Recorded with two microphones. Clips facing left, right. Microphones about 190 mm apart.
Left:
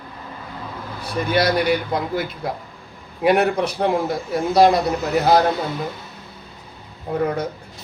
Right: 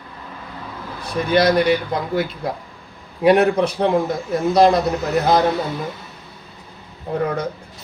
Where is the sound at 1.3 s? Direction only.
5° left (ahead or behind).